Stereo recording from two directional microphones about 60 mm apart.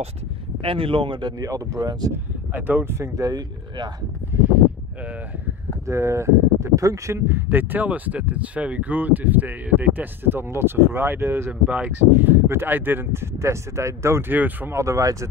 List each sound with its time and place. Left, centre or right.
1.4 s speech: right
2.5 s speech: right
3.0 s speech: right
4.3 s a sound: right
5.9 s speech: right
7.2 s speech: right
11.6 s speech: right
12.1 s speech: right
14.2 s speech: right
14.7 s speech: right